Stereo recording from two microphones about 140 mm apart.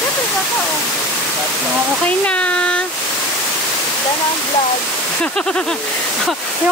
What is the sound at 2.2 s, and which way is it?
Speech, 10° left (ahead or behind).